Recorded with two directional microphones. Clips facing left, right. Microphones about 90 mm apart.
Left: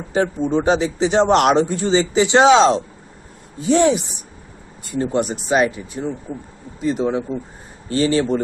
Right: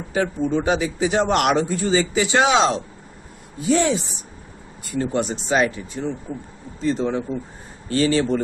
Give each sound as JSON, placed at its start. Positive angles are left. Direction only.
{"t": 0.1, "sound": "a man's voice", "side_deg": 30}